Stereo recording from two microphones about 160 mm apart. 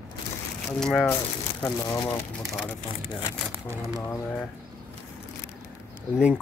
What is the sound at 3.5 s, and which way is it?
Speech, 15° right (ahead or behind).